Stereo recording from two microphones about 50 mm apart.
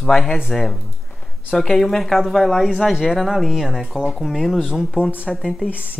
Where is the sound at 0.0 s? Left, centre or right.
Centre.